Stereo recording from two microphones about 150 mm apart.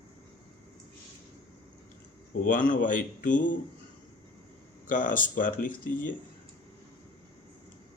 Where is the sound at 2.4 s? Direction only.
65° left (ahead or behind).